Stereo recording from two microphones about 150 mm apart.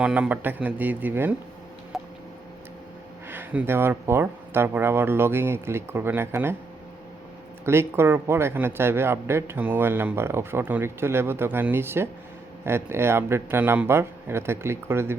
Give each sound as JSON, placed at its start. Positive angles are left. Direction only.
{"t": 0.0, "sound": "speech", "side_deg": -10}
{"t": 1.9, "sound": "a sound", "side_deg": 0}
{"t": 3.2, "sound": "speech", "side_deg": -10}
{"t": 7.6, "sound": "speech", "side_deg": -15}